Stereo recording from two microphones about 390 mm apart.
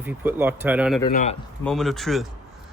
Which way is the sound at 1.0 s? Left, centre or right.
Centre.